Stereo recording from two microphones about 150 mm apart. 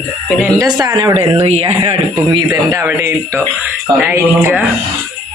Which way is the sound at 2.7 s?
15° right (ahead or behind).